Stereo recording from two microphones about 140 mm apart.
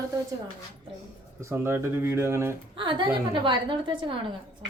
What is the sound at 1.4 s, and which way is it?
Speech, 20° right (ahead or behind).